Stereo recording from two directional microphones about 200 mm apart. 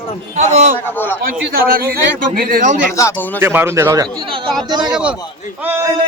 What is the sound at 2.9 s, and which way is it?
Speech, 15° left (ahead or behind).